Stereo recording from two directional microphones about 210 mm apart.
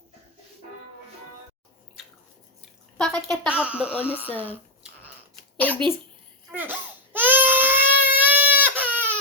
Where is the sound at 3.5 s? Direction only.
5° right (ahead or behind).